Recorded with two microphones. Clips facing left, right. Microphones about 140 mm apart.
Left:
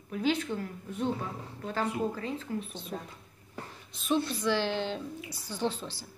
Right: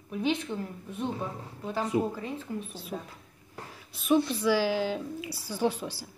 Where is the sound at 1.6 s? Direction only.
10° right (ahead or behind).